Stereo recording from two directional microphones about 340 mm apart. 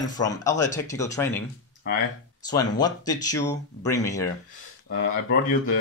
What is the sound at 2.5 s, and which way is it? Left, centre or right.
Speech, centre.